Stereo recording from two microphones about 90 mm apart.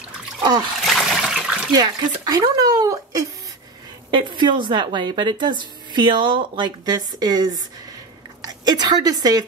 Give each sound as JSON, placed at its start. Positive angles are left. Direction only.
{"t": 0.4, "sound": "splash", "side_deg": -55}
{"t": 0.8, "sound": "water", "side_deg": 0}
{"t": 1.7, "sound": "speech", "side_deg": -50}
{"t": 4.1, "sound": "a woman's voice", "side_deg": -60}